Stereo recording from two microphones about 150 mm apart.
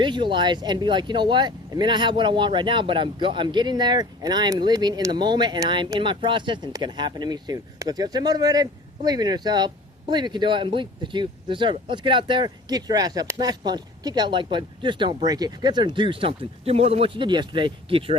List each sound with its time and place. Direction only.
0.0 s speech: 30° right (ahead or behind)